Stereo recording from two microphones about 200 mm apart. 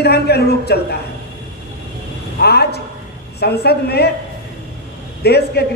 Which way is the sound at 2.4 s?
55° left (ahead or behind).